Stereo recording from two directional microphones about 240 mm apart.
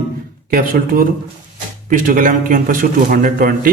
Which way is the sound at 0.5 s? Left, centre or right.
Right.